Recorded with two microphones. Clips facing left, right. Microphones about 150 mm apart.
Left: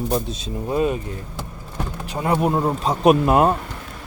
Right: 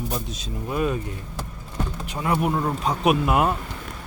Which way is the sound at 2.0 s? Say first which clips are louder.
Left 4 dB; 40° left (ahead or behind).